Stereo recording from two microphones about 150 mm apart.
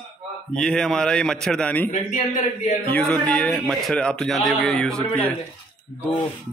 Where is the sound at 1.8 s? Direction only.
60° left (ahead or behind).